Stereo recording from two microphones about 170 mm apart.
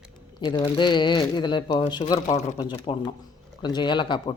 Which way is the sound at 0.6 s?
25° left (ahead or behind).